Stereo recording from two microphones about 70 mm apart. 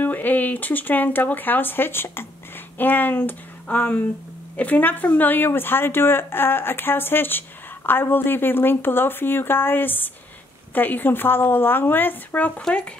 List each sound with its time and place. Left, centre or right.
0.0 s speech: left